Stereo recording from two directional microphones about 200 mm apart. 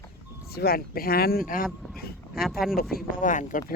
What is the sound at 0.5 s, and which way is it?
Speech, 50° left (ahead or behind).